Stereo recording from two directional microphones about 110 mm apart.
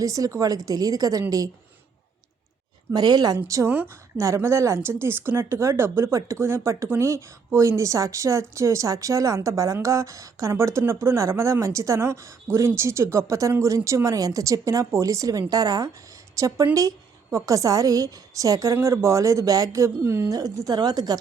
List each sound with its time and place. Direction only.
0.0 s a woman's voice: 30° right (ahead or behind)
2.9 s a woman's voice: 40° right (ahead or behind)